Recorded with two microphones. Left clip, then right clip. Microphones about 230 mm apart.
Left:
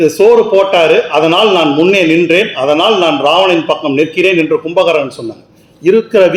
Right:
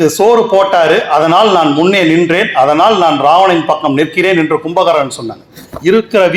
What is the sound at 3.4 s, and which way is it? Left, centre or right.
A man's voice, right.